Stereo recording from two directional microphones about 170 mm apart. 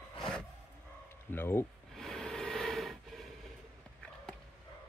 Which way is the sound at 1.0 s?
15° left (ahead or behind).